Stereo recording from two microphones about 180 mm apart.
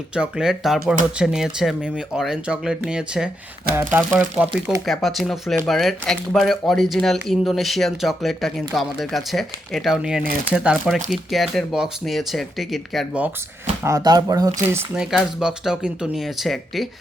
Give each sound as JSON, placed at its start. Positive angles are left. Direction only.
{"t": 0.1, "sound": "speech", "side_deg": -5}
{"t": 13.8, "sound": "speech", "side_deg": -20}
{"t": 14.9, "sound": "speech", "side_deg": -5}